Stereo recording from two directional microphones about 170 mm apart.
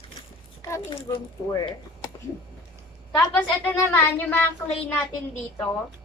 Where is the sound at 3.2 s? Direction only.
10° left (ahead or behind).